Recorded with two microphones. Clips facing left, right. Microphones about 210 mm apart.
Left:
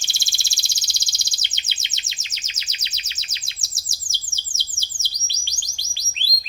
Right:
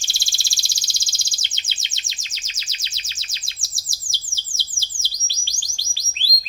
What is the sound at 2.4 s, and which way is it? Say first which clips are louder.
Chirp: left 1 dB; 20° left (ahead or behind).